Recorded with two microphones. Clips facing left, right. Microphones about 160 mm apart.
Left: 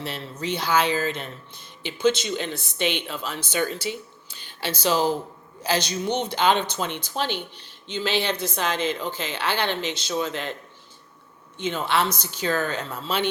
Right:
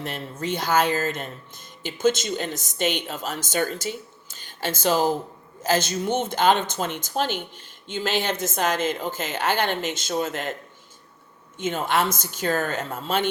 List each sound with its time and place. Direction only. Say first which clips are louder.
0.0 s speech: right 1 dB; 50° right (ahead or behind)
11.5 s speech: right 1 dB; 45° right (ahead or behind)